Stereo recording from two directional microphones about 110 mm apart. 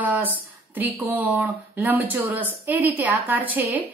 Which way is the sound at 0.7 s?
15° right (ahead or behind).